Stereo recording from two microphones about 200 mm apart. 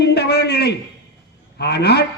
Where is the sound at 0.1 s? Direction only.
55° left (ahead or behind).